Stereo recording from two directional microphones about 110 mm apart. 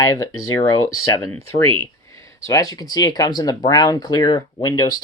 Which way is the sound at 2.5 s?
30° left (ahead or behind).